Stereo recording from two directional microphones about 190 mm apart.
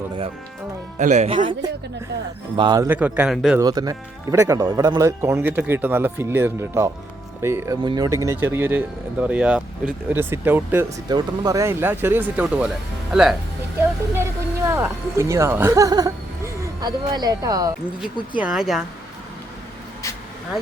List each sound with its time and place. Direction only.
0.9 s speech: 40° right (ahead or behind); by 2.9 s 20° right (ahead or behind)
2.9 s speech: 10° right (ahead or behind)
3.6 s speech: 20° right (ahead or behind); by 13.3 s centre (ahead or behind)
14.7 s speech: 15° right (ahead or behind)
18.0 s speech: 5° right (ahead or behind)